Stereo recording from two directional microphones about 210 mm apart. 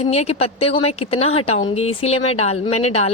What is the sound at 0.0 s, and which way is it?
A woman's voice, 30° left (ahead or behind).